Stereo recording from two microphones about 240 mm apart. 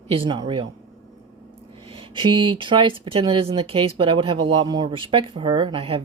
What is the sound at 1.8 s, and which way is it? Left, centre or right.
Speech, right.